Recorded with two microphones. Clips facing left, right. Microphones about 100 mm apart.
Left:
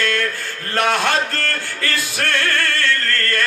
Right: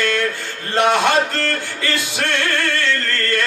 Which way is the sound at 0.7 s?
20° right (ahead or behind).